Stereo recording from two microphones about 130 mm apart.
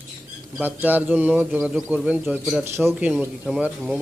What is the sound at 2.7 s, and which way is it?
A man's voice, 20° right (ahead or behind).